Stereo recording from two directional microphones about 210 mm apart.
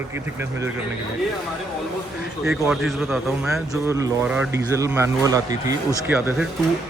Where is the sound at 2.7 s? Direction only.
Centre (ahead or behind).